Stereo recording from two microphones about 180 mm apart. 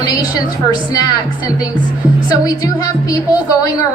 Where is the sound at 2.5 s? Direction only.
20° left (ahead or behind).